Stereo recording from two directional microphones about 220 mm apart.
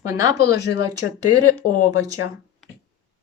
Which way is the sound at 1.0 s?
90° left.